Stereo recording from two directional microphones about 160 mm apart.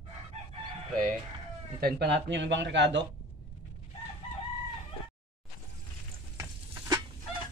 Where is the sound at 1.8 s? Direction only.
80° right.